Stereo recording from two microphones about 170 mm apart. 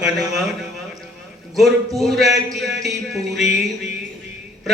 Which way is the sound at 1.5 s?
Centre (ahead or behind).